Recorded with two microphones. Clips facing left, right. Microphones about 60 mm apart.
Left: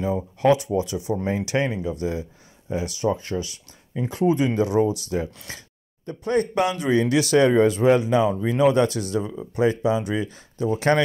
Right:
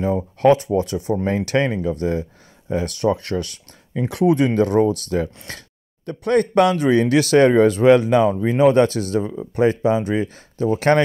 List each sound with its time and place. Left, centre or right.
0.0 s speech: right
2.7 s speech: right
4.5 s speech: right
6.0 s speech: right
8.3 s speech: right